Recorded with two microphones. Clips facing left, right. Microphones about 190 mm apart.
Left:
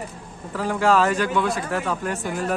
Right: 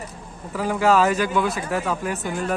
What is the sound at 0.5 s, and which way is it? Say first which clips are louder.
Speech: right 1 dB; 10° right (ahead or behind).